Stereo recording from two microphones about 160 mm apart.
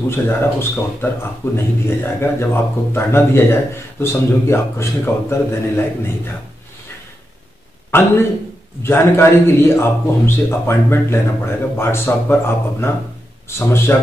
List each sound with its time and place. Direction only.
0.1 s speech: 15° left (ahead or behind)
7.9 s speech: 15° left (ahead or behind)